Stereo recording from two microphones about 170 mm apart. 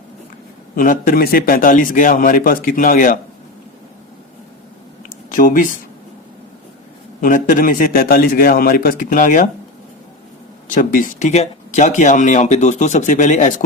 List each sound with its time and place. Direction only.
0.8 s a man's voice: 50° left (ahead or behind)
5.0 s a sound: 55° left (ahead or behind)
7.2 s a man's voice: 50° left (ahead or behind)
10.8 s speech: 50° left (ahead or behind)